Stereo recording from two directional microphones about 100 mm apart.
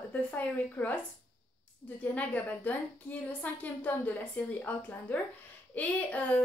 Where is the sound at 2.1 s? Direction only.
15° left (ahead or behind).